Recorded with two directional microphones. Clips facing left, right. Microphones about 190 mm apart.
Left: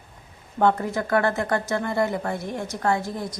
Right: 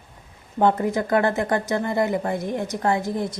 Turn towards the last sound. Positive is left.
turn(degrees=-20)  # may be behind; listen again after turning